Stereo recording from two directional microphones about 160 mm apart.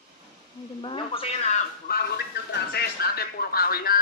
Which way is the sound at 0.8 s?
30° left (ahead or behind).